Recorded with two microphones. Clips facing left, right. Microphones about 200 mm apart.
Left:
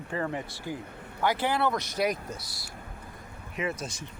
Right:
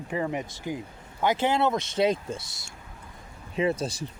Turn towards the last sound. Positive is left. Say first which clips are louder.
# right 7 dB
turn(degrees=-35)  # may be behind; listen again after turning